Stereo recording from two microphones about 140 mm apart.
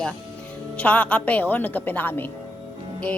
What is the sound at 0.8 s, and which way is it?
A woman's voice, 10° left (ahead or behind).